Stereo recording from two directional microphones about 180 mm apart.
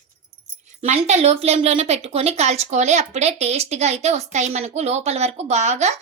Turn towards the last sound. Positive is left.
turn(degrees=-40)  # may be behind; listen again after turning